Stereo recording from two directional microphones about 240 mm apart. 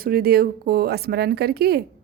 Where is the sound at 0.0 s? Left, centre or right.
Right.